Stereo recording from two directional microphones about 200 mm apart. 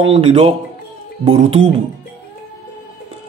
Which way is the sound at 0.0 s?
25° right (ahead or behind).